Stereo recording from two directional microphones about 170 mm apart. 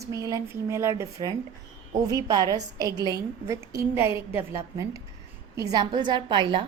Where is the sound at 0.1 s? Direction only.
20° right (ahead or behind).